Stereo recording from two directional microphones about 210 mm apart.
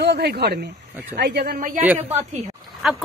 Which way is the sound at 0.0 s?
50° right (ahead or behind).